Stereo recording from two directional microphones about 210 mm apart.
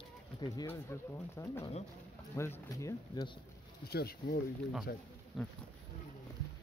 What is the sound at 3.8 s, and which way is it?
Speech, 50° left (ahead or behind).